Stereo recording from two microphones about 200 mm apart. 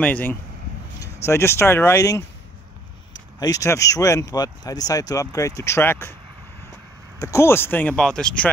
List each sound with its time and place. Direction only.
0.0 s speech: 10° left (ahead or behind)
7.2 s speech: 15° left (ahead or behind)